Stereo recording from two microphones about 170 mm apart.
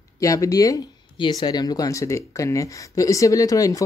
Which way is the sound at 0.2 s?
20° left (ahead or behind).